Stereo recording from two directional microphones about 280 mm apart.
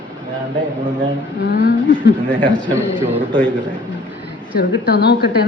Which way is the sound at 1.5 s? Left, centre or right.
Left.